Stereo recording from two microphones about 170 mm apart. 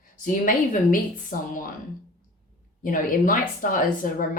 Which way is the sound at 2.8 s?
55° left (ahead or behind).